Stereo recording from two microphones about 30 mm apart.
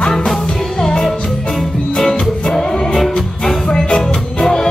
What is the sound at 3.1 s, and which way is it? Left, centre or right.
Music, left.